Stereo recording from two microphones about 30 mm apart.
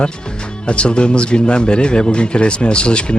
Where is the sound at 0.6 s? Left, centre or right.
Left.